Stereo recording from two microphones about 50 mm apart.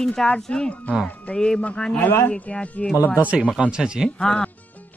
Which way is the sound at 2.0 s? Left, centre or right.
Left.